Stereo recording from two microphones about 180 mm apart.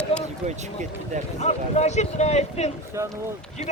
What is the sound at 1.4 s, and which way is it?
Speech, 40° left (ahead or behind).